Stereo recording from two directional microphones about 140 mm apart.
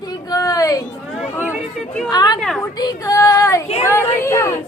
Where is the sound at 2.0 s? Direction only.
30° left (ahead or behind).